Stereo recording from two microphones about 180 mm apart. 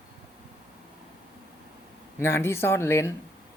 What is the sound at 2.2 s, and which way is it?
Speech, 15° left (ahead or behind).